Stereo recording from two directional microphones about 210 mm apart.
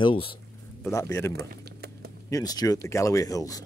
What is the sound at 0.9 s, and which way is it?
Speech, 15° left (ahead or behind).